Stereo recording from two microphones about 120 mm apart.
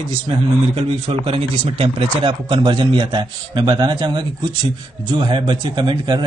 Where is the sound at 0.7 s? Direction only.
55° right (ahead or behind).